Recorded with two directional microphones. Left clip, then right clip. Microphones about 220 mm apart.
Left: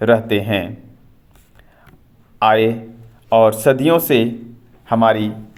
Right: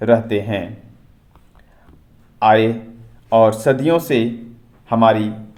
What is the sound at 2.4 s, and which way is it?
A man's voice, 25° left (ahead or behind).